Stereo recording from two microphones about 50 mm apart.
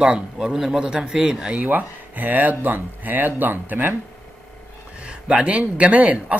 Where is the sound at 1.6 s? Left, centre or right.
Right.